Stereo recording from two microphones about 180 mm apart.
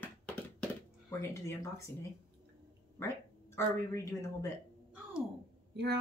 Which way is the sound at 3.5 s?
15° left (ahead or behind).